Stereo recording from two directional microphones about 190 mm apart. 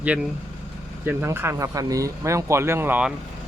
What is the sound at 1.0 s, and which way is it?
Speech, 10° right (ahead or behind).